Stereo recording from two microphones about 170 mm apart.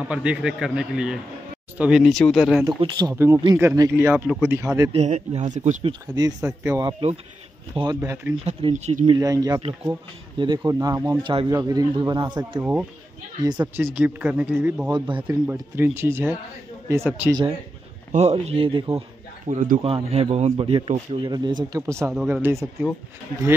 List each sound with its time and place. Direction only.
0.1 s speech: 5° right (ahead or behind)
2.8 s speech: 25° right (ahead or behind)
3.9 s speech: 10° right (ahead or behind)
4.9 s speech: 40° right (ahead or behind)
5.9 s speech: 20° right (ahead or behind)
8.5 s speech: 35° right (ahead or behind)
9.1 s speech: 20° right (ahead or behind)
13.9 s speech: 10° right (ahead or behind)
14.9 s speech: 25° right (ahead or behind)
15.5 s speech: 15° right (ahead or behind)
18.1 s speech: 35° right (ahead or behind)
18.9 s a sound: 40° right (ahead or behind)
19.8 s speech: 35° right (ahead or behind); by 22.8 s 15° right (ahead or behind)